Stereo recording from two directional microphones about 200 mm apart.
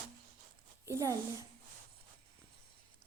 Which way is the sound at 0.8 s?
15° right (ahead or behind).